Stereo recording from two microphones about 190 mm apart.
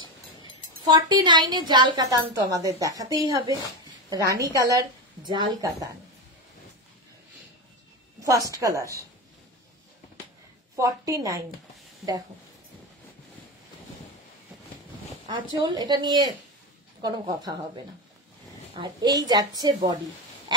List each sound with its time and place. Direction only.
0.5 s a woman's voice: 25° right (ahead or behind)
8.2 s a woman's voice: 15° right (ahead or behind)
10.8 s a woman's voice: 15° right (ahead or behind)
12.0 s speech: centre (ahead or behind)
15.2 s a woman's voice: 25° right (ahead or behind)
18.8 s a woman's voice: 20° right (ahead or behind)